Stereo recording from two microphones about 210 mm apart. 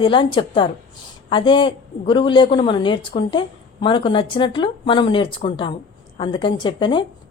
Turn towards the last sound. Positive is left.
turn(degrees=25)  # may be behind; listen again after turning